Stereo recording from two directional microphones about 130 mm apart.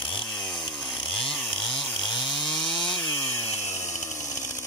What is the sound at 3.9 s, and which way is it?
Chainsaw, 65° left (ahead or behind).